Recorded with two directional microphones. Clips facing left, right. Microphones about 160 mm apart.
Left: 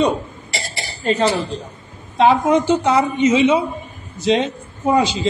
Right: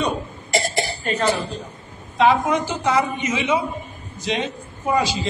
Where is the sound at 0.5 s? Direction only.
50° right (ahead or behind).